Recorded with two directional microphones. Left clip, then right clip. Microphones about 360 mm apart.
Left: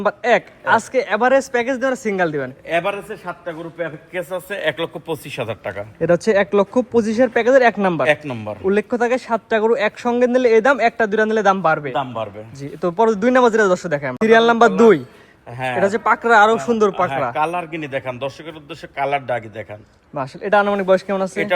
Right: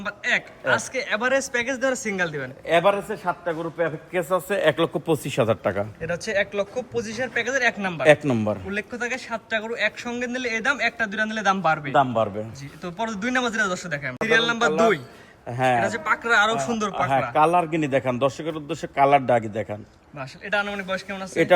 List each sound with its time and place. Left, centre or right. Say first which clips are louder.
0.0 s a man's voice: left 8 dB; centre
2.6 s a man's voice: right 3 dB; right
6.1 s speech: left 11 dB; centre
8.0 s a man's voice: right 1 dB; right
8.7 s a man's voice: left 10 dB; centre
11.9 s a man's voice: right 3 dB; right
12.8 s a man's voice: left 12 dB; centre
15.4 s a man's voice: right 2 dB; right
15.8 s a man's voice: left 7 dB; centre
17.3 s a man's voice: right 2 dB; right
20.1 s a man's voice: left 9 dB; centre